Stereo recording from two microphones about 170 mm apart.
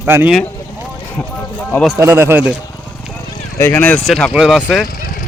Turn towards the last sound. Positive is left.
turn(degrees=0)  # may be behind; listen again after turning